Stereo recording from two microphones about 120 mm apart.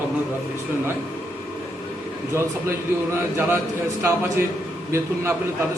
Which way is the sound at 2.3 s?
20° right (ahead or behind).